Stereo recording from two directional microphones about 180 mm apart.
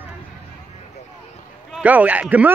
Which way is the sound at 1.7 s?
5° right (ahead or behind).